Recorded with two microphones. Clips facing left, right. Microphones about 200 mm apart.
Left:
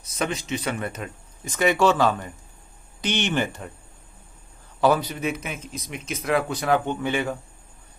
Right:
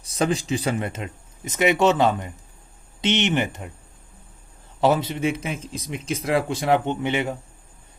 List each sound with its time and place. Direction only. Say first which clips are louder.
0.0 s speech: right 5 dB; 30° right (ahead or behind)
4.8 s speech: right 1 dB; 25° right (ahead or behind)